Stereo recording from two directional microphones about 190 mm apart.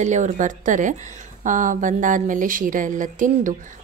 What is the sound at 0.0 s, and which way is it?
Speech, 40° right (ahead or behind).